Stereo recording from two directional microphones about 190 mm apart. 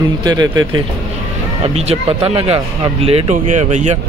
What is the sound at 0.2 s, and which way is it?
Speech, 20° right (ahead or behind).